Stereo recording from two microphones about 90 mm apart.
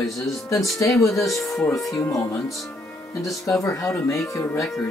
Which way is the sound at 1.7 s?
35° left (ahead or behind).